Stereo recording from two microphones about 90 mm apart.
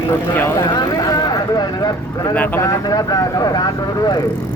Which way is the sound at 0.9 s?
45° left (ahead or behind).